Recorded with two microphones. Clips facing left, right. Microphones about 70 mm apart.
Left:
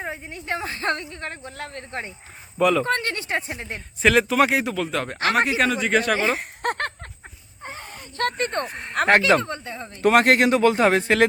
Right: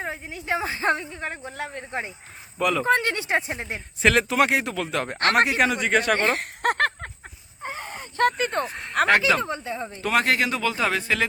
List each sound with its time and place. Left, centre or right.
0.0 s a woman's voice: centre
2.6 s speech: centre
2.8 s a woman's voice: centre
3.8 s speech: centre
7.9 s a sound: right
8.3 s speech: centre
10.0 s speech: left